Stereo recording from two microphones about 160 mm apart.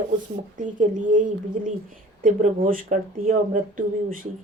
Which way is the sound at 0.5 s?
55° right (ahead or behind).